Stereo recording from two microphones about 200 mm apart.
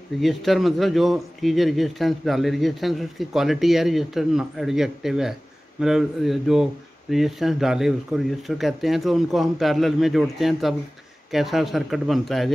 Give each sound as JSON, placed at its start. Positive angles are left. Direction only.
{"t": 0.2, "sound": "a man's voice", "side_deg": 0}